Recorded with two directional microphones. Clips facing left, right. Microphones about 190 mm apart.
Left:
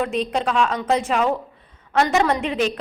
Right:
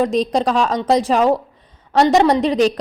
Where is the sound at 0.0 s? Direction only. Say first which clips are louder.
Right 5 dB; 40° right (ahead or behind).